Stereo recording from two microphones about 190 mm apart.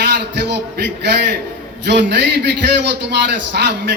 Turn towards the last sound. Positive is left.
turn(degrees=-65)  # may be behind; listen again after turning